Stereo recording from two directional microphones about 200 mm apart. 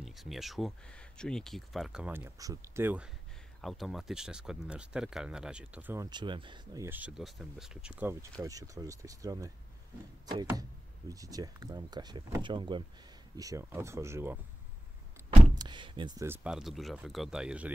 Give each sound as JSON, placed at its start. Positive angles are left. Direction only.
{"t": 0.0, "sound": "speech", "side_deg": 0}
{"t": 6.0, "sound": "speech", "side_deg": -20}
{"t": 15.5, "sound": "a sound", "side_deg": -20}
{"t": 16.3, "sound": "speech", "side_deg": -5}